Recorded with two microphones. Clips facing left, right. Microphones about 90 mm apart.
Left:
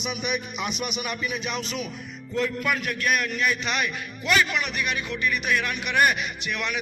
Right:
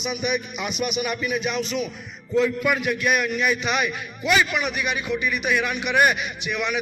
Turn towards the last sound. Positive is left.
turn(degrees=0)  # may be behind; listen again after turning